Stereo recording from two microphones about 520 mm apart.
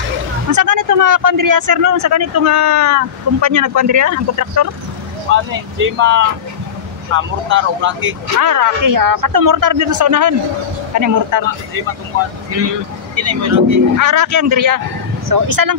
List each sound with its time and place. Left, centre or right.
0.5 s speech: right
5.3 s speech: right
8.4 s speech: right
13.1 s speech: right